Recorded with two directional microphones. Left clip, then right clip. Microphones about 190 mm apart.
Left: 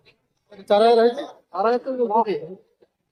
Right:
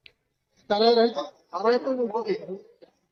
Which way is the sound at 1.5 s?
30° left (ahead or behind).